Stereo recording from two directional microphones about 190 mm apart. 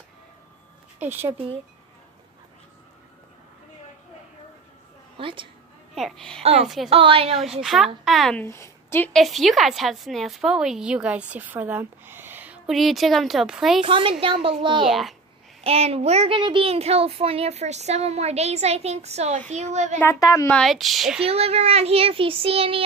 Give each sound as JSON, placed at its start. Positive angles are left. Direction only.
{"t": 0.9, "sound": "speech", "side_deg": -10}
{"t": 5.1, "sound": "a woman's voice", "side_deg": -25}
{"t": 5.9, "sound": "a woman's voice", "side_deg": 0}
{"t": 6.4, "sound": "a child's voice", "side_deg": -35}
{"t": 7.6, "sound": "a woman's voice", "side_deg": 0}
{"t": 9.2, "sound": "a woman's voice", "side_deg": 0}
{"t": 13.8, "sound": "a child's voice", "side_deg": -30}
{"t": 14.9, "sound": "a woman's voice", "side_deg": 0}
{"t": 15.6, "sound": "a child's voice", "side_deg": -30}
{"t": 20.0, "sound": "a woman's voice", "side_deg": 15}
{"t": 21.2, "sound": "a child's voice", "side_deg": -30}